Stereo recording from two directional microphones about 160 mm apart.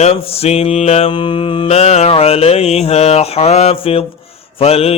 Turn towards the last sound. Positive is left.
turn(degrees=40)  # may be behind; listen again after turning